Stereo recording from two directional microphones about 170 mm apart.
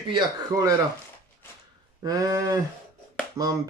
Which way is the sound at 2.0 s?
20° right (ahead or behind).